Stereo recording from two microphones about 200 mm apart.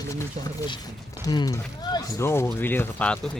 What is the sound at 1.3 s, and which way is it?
Speech, 20° left (ahead or behind).